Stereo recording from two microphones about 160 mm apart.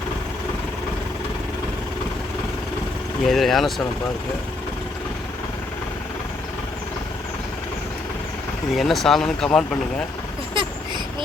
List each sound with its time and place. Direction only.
3.2 s speech: centre (ahead or behind)
8.7 s speech: centre (ahead or behind)